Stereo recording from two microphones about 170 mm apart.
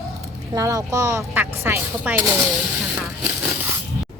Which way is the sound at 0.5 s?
20° right (ahead or behind).